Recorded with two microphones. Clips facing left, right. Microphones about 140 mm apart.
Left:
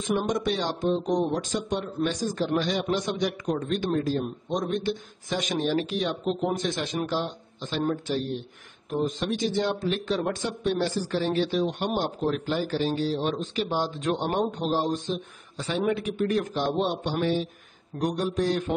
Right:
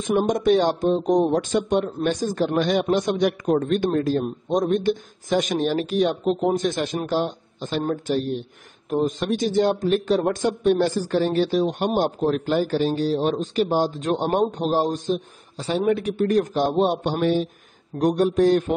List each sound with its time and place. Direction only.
0.1 s speech: 50° right (ahead or behind)
1.3 s speech: 60° right (ahead or behind)
8.9 s speech: 50° right (ahead or behind)